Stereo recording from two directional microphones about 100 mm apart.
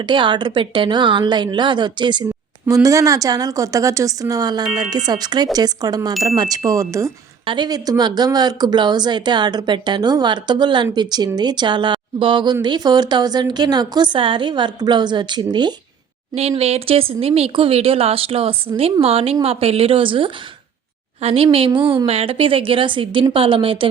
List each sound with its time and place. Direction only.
0.0 s speech: 50° right (ahead or behind)
2.6 s a woman's voice: 35° right (ahead or behind)
7.4 s speech: 50° right (ahead or behind)
16.3 s speech: 90° right; by 20.3 s 60° right (ahead or behind)
21.2 s a woman's voice: 80° right; by 23.9 s 60° right (ahead or behind)